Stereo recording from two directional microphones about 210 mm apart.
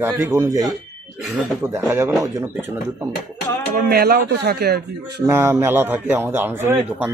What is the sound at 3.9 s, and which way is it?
Speech, 50° right (ahead or behind).